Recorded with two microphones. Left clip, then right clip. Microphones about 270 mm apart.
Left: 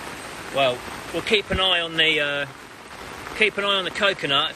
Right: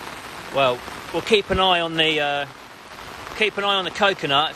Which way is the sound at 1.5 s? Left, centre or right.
Right.